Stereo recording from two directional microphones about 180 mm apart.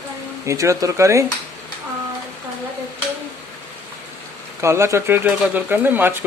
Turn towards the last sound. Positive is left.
turn(degrees=-10)  # may be behind; listen again after turning